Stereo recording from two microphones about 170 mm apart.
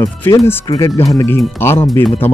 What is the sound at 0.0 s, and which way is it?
Speech, 20° left (ahead or behind).